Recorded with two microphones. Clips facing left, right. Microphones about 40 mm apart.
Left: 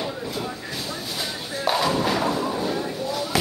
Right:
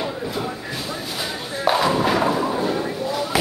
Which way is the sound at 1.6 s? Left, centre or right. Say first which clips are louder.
Right 3 dB; centre.